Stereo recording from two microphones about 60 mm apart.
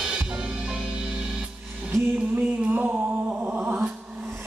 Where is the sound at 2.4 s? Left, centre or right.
Right.